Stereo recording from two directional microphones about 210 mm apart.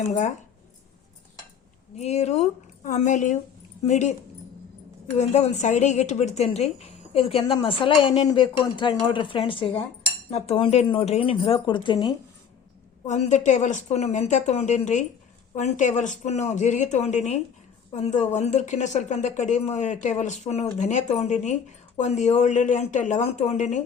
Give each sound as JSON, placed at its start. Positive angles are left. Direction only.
{"t": 0.1, "sound": "a woman's voice", "side_deg": 35}
{"t": 2.0, "sound": "a woman's voice", "side_deg": 30}
{"t": 5.1, "sound": "a woman's voice", "side_deg": 30}
{"t": 13.1, "sound": "a woman's voice", "side_deg": 35}